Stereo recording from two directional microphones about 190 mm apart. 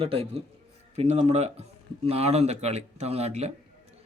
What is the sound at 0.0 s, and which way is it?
A man's voice, 30° right (ahead or behind).